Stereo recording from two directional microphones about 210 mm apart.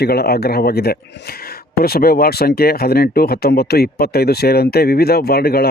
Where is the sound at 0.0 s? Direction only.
50° left (ahead or behind).